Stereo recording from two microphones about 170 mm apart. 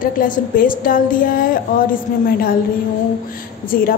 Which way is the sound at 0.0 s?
55° left (ahead or behind).